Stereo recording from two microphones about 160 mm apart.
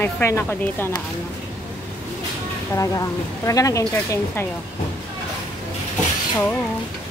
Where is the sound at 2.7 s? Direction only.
20° left (ahead or behind).